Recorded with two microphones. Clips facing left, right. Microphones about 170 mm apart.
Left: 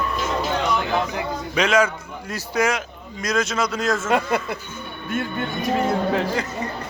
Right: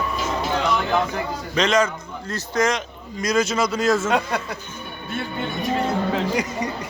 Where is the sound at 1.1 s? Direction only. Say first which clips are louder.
Even; 5° left (ahead or behind).